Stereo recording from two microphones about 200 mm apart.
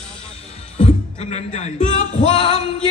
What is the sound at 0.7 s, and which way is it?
Singing, 35° left (ahead or behind).